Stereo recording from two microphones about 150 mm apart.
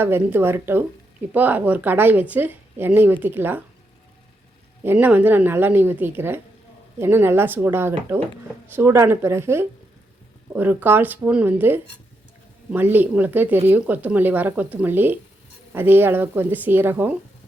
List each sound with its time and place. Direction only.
0.0 s speech: 15° right (ahead or behind)
4.8 s speech: 15° right (ahead or behind)